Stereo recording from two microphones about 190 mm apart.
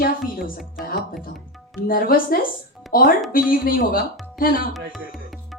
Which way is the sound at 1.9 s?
50° left (ahead or behind).